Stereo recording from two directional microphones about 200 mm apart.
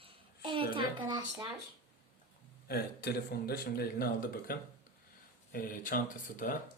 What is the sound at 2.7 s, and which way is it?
A man's voice, 50° left (ahead or behind).